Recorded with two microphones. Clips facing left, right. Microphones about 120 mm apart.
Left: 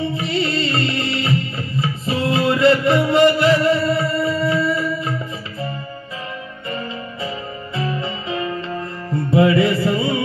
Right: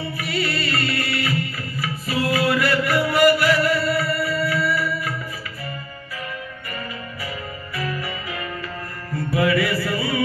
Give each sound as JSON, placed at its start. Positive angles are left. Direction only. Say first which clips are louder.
{"t": 0.0, "sound": "music", "louder": "left 5 dB", "side_deg": 25}
{"t": 7.7, "sound": "music", "louder": "left 4 dB", "side_deg": 25}